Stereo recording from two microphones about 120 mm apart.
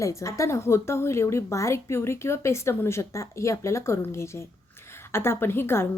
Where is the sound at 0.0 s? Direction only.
25° left (ahead or behind).